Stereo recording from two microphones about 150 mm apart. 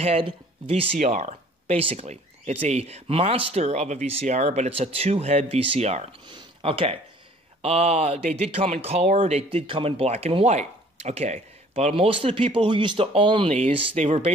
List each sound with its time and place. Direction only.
0.0 s speech: 40° right (ahead or behind)
0.9 s speech: 50° right (ahead or behind)
6.2 s speech: 35° right (ahead or behind)